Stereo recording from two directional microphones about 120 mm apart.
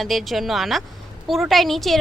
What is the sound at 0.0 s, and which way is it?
A woman's voice, centre (ahead or behind).